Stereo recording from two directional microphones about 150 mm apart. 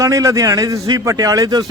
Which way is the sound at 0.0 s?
20° right (ahead or behind).